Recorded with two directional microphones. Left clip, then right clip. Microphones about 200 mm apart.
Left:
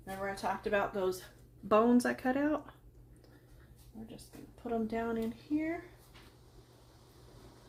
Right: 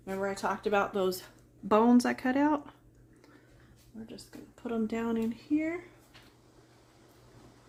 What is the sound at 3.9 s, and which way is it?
Speech, 50° right (ahead or behind).